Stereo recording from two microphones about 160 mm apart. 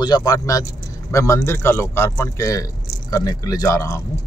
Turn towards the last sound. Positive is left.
turn(degrees=20)  # may be behind; listen again after turning